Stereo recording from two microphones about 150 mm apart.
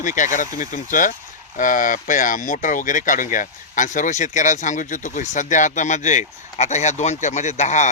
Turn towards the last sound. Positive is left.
turn(degrees=50)  # may be behind; listen again after turning